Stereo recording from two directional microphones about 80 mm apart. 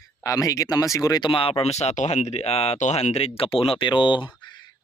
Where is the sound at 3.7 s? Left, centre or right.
Left.